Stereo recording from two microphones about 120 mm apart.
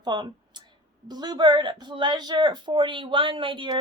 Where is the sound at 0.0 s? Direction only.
35° right (ahead or behind).